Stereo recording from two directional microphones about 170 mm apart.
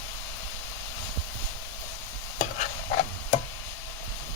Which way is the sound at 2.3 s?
45° left (ahead or behind).